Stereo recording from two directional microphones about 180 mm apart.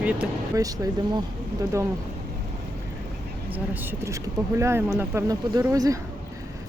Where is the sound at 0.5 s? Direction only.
20° right (ahead or behind).